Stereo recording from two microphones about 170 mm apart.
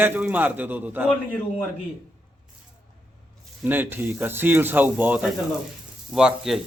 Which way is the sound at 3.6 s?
10° right (ahead or behind).